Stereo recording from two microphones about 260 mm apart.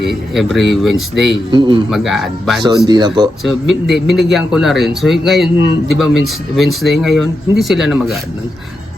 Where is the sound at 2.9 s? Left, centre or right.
Centre.